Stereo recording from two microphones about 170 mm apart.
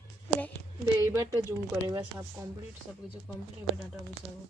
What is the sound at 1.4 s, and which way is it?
Speech, 15° right (ahead or behind).